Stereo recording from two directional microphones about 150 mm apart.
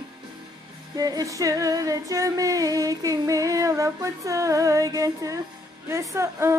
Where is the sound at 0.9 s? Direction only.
25° right (ahead or behind).